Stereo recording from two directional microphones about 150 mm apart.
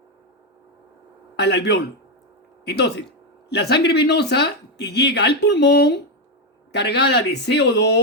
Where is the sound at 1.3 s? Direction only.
90° left.